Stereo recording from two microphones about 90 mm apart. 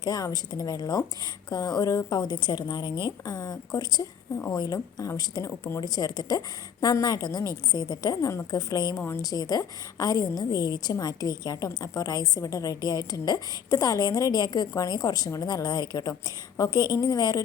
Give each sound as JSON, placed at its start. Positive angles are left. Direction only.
{"t": 0.0, "sound": "a woman's voice", "side_deg": 45}
{"t": 3.2, "sound": "a woman's voice", "side_deg": 40}